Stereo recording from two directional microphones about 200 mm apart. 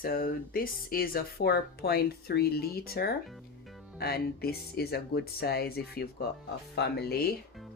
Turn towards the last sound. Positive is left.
turn(degrees=50)  # may be behind; listen again after turning